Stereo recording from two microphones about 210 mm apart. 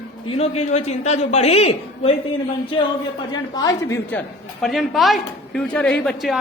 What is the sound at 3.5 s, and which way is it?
Speech, 20° left (ahead or behind).